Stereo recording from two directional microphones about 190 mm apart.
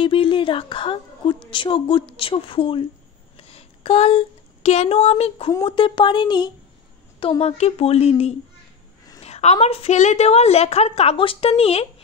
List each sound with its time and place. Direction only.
0.0 s a woman's voice: 30° left (ahead or behind)